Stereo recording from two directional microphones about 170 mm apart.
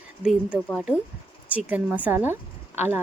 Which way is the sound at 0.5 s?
10° left (ahead or behind).